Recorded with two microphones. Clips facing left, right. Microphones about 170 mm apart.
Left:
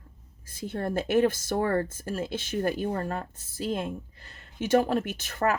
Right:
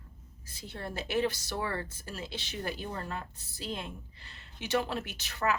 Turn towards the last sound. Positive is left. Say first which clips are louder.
# left 5 dB
turn(degrees=50)  # may be behind; listen again after turning